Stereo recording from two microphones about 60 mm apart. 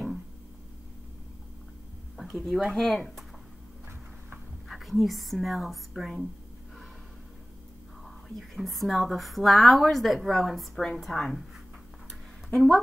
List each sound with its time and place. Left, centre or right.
2.1 s a sound: centre
2.8 s speech: centre
4.6 s speech: centre
8.0 s speech: centre
12.4 s speech: centre